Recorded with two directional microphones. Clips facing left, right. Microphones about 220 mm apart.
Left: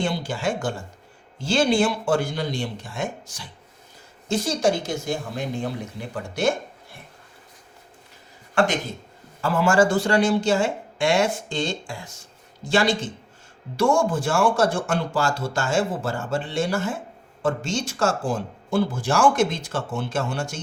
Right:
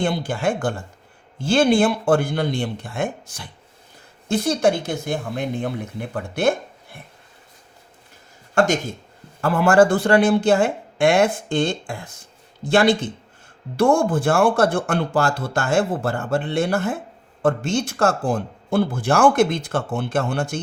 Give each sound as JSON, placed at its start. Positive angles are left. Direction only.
{"t": 0.0, "sound": "speech", "side_deg": -55}
{"t": 8.5, "sound": "speech", "side_deg": -45}
{"t": 9.4, "sound": "speech", "side_deg": -55}